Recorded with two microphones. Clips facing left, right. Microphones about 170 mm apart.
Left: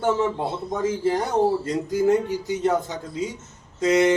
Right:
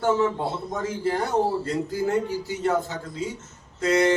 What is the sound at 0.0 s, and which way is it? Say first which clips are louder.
Speech: even; 20° left (ahead or behind).